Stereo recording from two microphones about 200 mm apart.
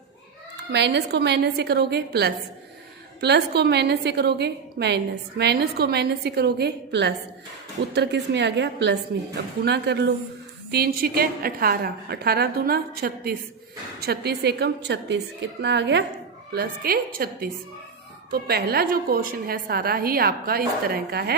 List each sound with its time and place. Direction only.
0.7 s a woman's voice: 60° right (ahead or behind)